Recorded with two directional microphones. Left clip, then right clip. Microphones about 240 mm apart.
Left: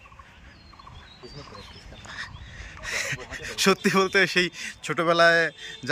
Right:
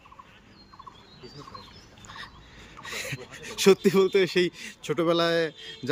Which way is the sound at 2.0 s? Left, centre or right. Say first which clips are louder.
Left 5 dB; centre.